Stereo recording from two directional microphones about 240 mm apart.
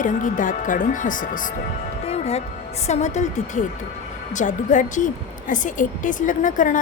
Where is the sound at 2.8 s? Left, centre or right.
Left.